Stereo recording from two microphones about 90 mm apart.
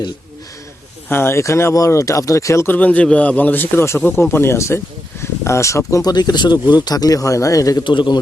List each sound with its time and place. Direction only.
1.0 s speech: 25° left (ahead or behind)
2.7 s speech: 15° left (ahead or behind); by 7.9 s 40° left (ahead or behind)
7.9 s a man's voice: 60° left (ahead or behind)